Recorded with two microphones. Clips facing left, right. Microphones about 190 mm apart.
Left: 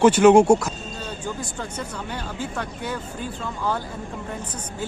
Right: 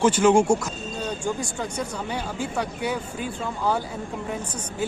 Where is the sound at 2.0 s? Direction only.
10° right (ahead or behind).